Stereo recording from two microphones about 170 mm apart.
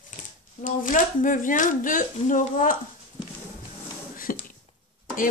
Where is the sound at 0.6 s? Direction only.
50° left (ahead or behind).